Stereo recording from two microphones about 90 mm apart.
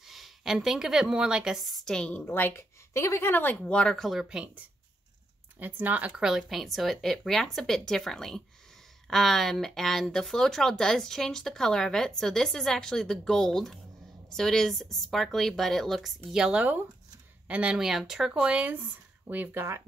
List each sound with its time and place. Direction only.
0.0 s a woman's voice: 5° right (ahead or behind)
2.2 s speech: 25° left (ahead or behind); by 4.5 s 5° right (ahead or behind)
5.6 s speech: 20° right (ahead or behind); by 16.1 s 5° left (ahead or behind)
16.3 s speech: 10° right (ahead or behind); by 19.8 s 25° right (ahead or behind)